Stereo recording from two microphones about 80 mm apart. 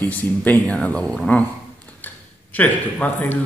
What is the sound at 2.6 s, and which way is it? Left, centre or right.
Speech, left.